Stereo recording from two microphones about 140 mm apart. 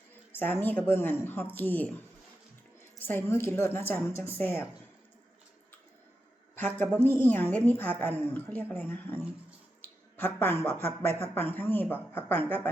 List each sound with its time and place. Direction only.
0.1 s a woman's voice: 15° left (ahead or behind)
3.0 s a woman's voice: 15° left (ahead or behind)
6.6 s a woman's voice: 10° left (ahead or behind)
6.9 s a woman's voice: 15° right (ahead or behind)
7.2 s a woman's voice: 15° left (ahead or behind)